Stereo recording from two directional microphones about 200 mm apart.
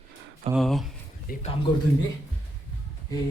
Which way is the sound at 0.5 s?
Centre (ahead or behind).